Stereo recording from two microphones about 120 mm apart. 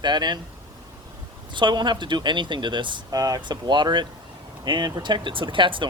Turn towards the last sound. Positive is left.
turn(degrees=-45)  # may be behind; listen again after turning